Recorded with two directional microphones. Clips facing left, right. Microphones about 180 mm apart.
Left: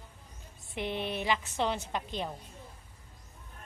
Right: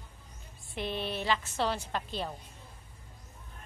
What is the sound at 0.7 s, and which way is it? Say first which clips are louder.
A woman's voice: left 1 dB; 15° left (ahead or behind).